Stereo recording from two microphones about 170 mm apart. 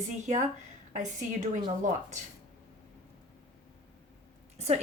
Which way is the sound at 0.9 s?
45° right (ahead or behind).